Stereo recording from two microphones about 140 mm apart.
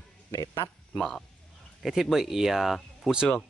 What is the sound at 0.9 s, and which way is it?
Speech, 5° left (ahead or behind).